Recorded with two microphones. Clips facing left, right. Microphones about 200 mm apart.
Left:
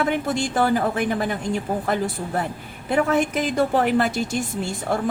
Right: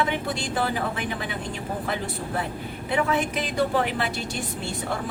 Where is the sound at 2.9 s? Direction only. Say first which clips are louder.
Left 5 dB; 45° left (ahead or behind).